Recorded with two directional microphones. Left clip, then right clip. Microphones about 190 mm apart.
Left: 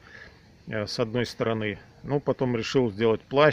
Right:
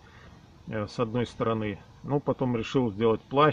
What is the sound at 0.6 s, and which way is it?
Speech, 15° left (ahead or behind).